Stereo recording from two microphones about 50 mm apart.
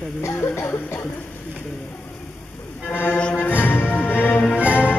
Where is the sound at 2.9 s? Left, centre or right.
Left.